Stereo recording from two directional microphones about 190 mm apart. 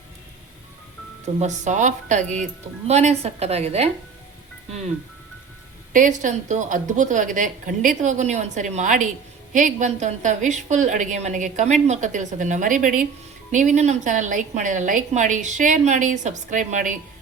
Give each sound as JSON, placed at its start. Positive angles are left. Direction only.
{"t": 1.4, "sound": "a woman's voice", "side_deg": -40}
{"t": 5.9, "sound": "a woman's voice", "side_deg": -45}